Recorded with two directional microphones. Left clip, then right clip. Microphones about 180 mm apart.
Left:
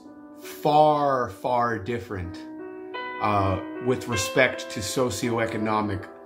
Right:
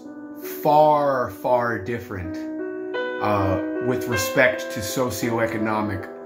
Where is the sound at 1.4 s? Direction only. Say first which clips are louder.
Right 3 dB; 30° left (ahead or behind).